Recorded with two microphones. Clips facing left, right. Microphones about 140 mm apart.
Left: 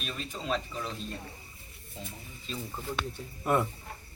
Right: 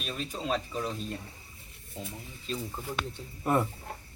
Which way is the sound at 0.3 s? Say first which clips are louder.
Right 1 dB; 5° right (ahead or behind).